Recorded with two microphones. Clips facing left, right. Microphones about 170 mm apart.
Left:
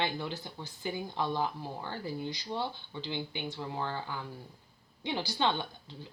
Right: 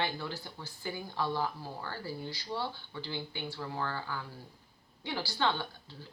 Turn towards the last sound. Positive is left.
turn(degrees=20)  # may be behind; listen again after turning